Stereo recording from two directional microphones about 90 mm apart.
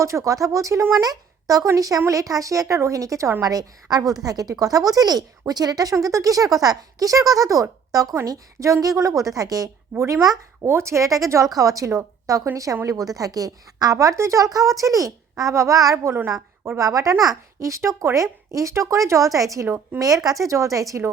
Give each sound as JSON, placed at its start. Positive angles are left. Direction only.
{"t": 0.0, "sound": "a woman's voice", "side_deg": -35}
{"t": 1.0, "sound": "a woman's voice", "side_deg": -40}
{"t": 19.6, "sound": "a woman's voice", "side_deg": -20}
{"t": 20.2, "sound": "a woman's voice", "side_deg": -40}